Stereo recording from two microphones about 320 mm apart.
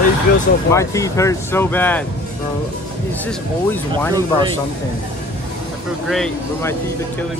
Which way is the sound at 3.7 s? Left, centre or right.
Centre.